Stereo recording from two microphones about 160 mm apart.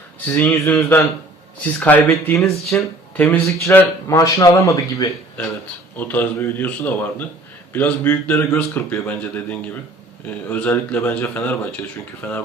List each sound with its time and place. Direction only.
0.3 s speech: 10° left (ahead or behind)